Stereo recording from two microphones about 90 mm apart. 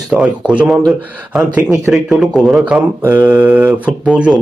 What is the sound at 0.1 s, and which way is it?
Speech, 10° right (ahead or behind).